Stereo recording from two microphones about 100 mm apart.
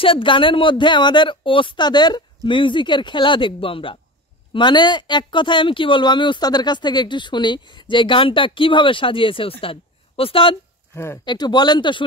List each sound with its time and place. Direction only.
0.0 s speech: 60° left (ahead or behind)
4.6 s speech: 50° left (ahead or behind)
11.2 s speech: 45° left (ahead or behind)